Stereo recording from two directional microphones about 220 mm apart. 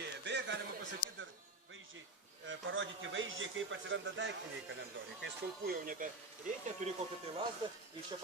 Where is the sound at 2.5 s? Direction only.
60° right (ahead or behind).